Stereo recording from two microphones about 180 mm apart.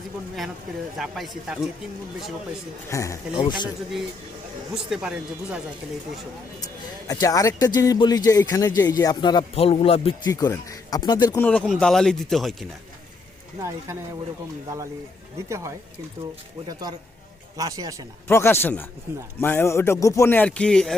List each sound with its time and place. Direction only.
0.9 s speech: centre (ahead or behind)
2.9 s speech: 15° left (ahead or behind)
4.7 s speech: 5° right (ahead or behind)
7.1 s speech: 20° left (ahead or behind)
10.2 s speech: 20° left (ahead or behind)
11.3 s speech: 10° left (ahead or behind)
13.6 s speech: 15° right (ahead or behind)
15.4 s speech: 15° right (ahead or behind)
17.6 s a man's voice: 20° right (ahead or behind)
18.3 s speech: 15° left (ahead or behind)